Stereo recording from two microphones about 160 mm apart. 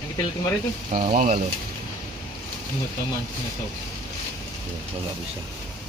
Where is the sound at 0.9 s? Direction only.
60° right (ahead or behind).